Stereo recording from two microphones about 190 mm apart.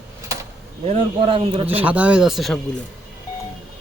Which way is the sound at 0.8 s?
30° right (ahead or behind).